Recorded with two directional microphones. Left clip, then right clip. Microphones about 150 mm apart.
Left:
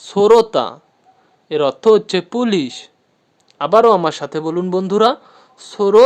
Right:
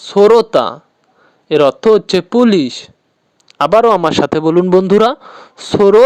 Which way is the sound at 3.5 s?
55° right (ahead or behind).